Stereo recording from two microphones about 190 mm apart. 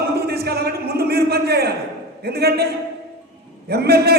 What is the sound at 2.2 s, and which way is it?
Speech, 55° right (ahead or behind).